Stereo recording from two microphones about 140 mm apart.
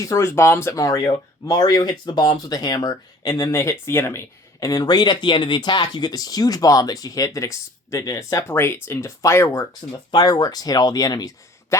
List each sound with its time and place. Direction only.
0.0 s speech: 20° left (ahead or behind)